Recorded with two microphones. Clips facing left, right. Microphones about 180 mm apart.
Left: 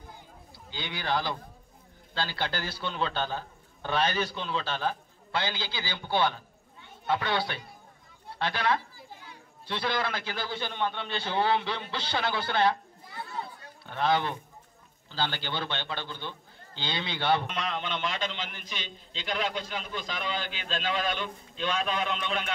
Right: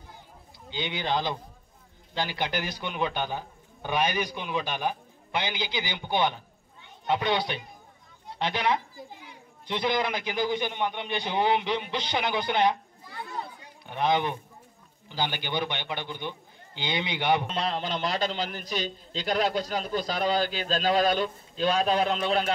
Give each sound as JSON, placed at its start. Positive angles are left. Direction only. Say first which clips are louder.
{"t": 0.7, "sound": "a man's voice", "louder": "right 3 dB", "side_deg": -20}
{"t": 13.2, "sound": "children playing", "louder": "right 1 dB", "side_deg": -15}
{"t": 15.0, "sound": "a man's voice", "louder": "right 1 dB", "side_deg": -15}
{"t": 17.5, "sound": "a man's voice", "louder": "right 3 dB", "side_deg": -35}